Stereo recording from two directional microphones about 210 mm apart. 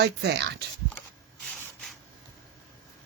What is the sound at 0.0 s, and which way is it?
Speech, 50° right (ahead or behind).